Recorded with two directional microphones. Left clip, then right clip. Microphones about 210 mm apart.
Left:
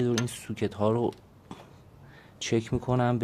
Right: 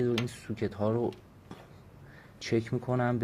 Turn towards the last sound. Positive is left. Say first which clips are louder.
# left 3 dB
turn(degrees=20)  # may be behind; listen again after turning